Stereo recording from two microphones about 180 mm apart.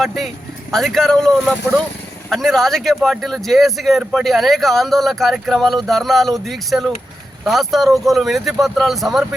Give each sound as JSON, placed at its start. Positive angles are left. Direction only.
{"t": 0.0, "sound": "speech", "side_deg": 0}